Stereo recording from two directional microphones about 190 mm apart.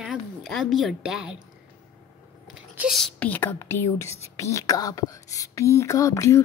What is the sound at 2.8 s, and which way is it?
Speech, centre (ahead or behind).